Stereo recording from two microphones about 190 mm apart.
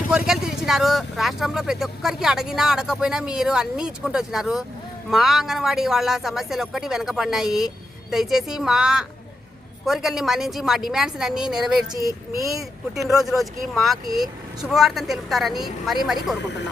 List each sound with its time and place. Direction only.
0.3 s speech: centre (ahead or behind)
13.0 s speech: centre (ahead or behind)